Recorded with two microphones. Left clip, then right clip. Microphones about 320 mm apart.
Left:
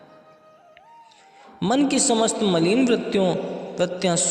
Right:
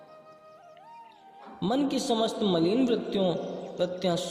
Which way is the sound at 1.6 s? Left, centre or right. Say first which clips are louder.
Left 7 dB; left.